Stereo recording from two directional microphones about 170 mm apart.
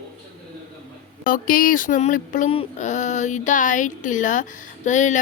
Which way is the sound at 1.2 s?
55° left (ahead or behind).